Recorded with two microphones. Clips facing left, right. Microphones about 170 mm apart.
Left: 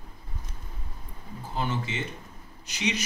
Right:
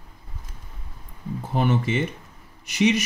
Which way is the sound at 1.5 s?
60° right (ahead or behind).